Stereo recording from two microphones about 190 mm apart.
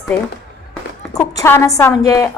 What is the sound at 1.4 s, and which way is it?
Speech, 10° left (ahead or behind).